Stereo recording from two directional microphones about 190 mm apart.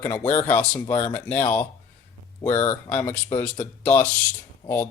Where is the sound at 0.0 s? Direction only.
10° left (ahead or behind).